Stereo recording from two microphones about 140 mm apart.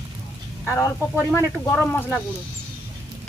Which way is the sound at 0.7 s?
20° left (ahead or behind).